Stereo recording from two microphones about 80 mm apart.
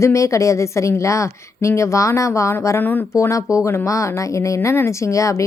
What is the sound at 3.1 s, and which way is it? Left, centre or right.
A woman's voice, left.